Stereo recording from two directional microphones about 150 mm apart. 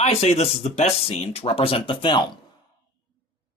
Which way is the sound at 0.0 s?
45° left (ahead or behind).